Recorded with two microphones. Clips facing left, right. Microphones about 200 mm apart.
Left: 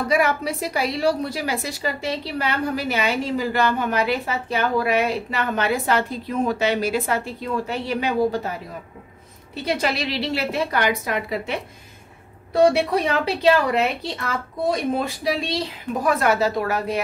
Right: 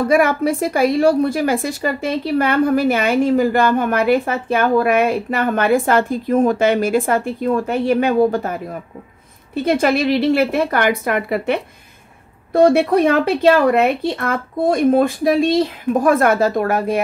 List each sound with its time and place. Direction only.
0.1 s a woman's voice: 50° right (ahead or behind)